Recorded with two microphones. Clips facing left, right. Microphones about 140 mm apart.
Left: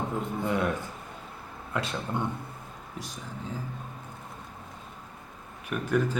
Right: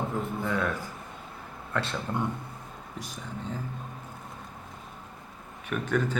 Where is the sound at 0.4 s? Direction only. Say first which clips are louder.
Left 3 dB; 20° left (ahead or behind).